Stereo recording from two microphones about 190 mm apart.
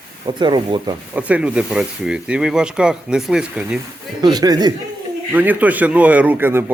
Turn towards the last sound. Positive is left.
turn(degrees=-10)  # may be behind; listen again after turning